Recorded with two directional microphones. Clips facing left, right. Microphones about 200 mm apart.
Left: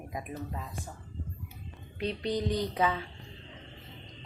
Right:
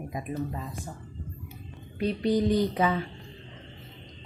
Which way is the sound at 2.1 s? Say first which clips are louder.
Right 6 dB; 5° right (ahead or behind).